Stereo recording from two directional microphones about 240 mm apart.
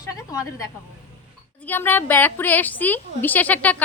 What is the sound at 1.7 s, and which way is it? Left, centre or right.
A woman's voice, centre.